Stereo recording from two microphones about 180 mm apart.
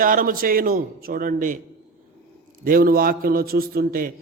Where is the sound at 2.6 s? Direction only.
50° right (ahead or behind).